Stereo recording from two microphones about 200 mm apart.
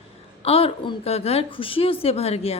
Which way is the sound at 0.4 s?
30° left (ahead or behind).